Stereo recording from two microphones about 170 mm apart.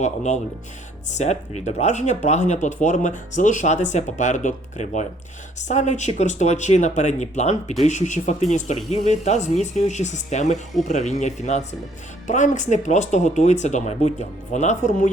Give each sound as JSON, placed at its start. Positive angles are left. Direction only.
{"t": 0.0, "sound": "speech", "side_deg": 45}